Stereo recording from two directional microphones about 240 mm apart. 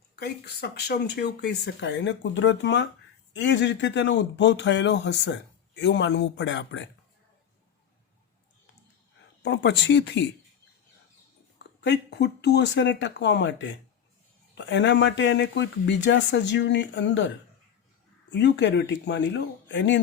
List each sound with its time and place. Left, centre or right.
0.2 s speech: left
9.4 s speech: left
11.8 s speech: left